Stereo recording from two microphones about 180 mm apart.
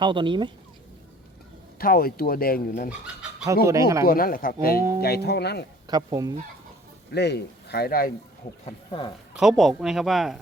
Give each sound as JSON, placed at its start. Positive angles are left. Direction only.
{"t": 0.0, "sound": "speech", "side_deg": -25}
{"t": 1.8, "sound": "speech", "side_deg": 55}
{"t": 3.4, "sound": "speech", "side_deg": -20}
{"t": 4.0, "sound": "speech", "side_deg": 55}
{"t": 5.9, "sound": "speech", "side_deg": -20}
{"t": 7.1, "sound": "speech", "side_deg": 65}
{"t": 8.6, "sound": "speech", "side_deg": 25}
{"t": 9.3, "sound": "speech", "side_deg": 0}